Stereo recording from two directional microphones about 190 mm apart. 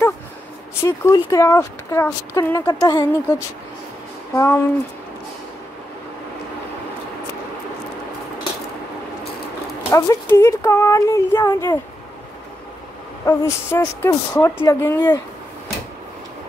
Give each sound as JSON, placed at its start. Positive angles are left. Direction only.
{"t": 0.8, "sound": "speech", "side_deg": 15}
{"t": 9.8, "sound": "speech", "side_deg": 15}
{"t": 13.2, "sound": "speech", "side_deg": 15}